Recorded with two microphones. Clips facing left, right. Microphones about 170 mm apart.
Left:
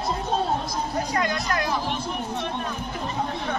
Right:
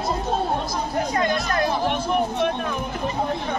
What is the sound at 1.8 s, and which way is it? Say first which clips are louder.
Chatter: right 7 dB; 60° right (ahead or behind).